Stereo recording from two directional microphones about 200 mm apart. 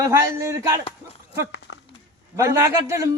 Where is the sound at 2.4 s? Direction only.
15° right (ahead or behind).